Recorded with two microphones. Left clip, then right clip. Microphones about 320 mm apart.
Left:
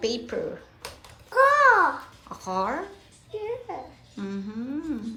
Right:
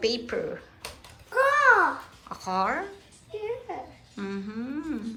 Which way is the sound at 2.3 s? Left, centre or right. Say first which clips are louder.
Right 1 dB; centre.